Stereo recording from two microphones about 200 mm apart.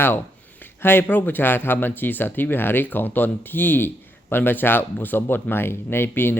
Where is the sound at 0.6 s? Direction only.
10° left (ahead or behind).